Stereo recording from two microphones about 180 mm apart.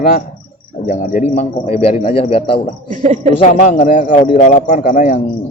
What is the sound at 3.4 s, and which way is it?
A man's voice, 45° left (ahead or behind).